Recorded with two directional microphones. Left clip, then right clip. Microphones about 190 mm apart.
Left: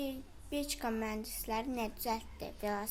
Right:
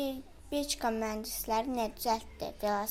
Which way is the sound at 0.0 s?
15° right (ahead or behind).